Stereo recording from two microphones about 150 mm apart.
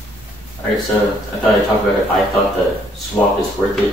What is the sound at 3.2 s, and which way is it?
Speech, 10° left (ahead or behind).